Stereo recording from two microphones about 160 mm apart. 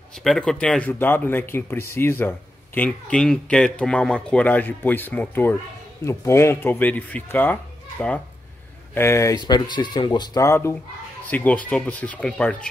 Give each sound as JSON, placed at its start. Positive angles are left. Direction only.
{"t": 0.2, "sound": "speech", "side_deg": 0}
{"t": 8.9, "sound": "speech", "side_deg": 15}